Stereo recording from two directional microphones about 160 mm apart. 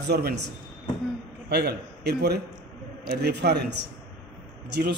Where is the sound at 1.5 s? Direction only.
80° right.